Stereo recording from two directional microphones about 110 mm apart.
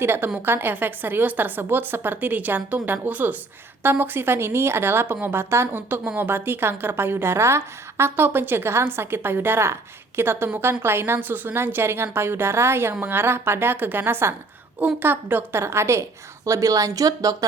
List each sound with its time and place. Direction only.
0.0 s a woman's voice: 20° right (ahead or behind)